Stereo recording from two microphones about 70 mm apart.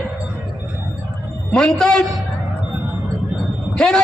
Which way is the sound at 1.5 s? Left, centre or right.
Centre.